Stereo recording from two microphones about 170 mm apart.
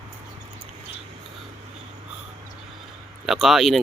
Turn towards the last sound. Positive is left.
turn(degrees=0)  # may be behind; listen again after turning